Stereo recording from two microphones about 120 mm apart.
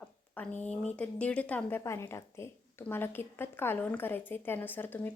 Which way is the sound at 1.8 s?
25° left (ahead or behind).